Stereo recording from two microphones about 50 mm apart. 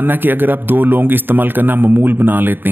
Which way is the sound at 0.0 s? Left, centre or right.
Right.